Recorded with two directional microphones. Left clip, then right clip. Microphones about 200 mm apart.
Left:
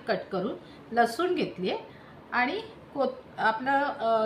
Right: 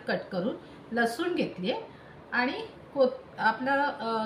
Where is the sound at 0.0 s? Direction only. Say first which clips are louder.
Left 1 dB; 15° left (ahead or behind).